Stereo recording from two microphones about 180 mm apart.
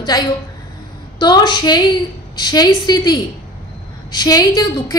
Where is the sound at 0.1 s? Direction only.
20° left (ahead or behind).